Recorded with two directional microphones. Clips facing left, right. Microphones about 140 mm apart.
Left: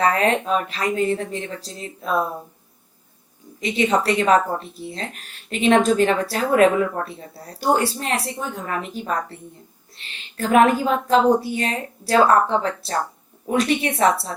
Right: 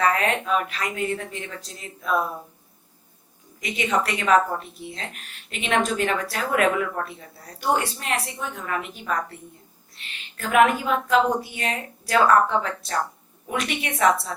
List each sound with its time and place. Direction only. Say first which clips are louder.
0.0 s a woman's voice: left 3 dB; 30° left (ahead or behind)
3.6 s a woman's voice: left 5 dB; 30° left (ahead or behind)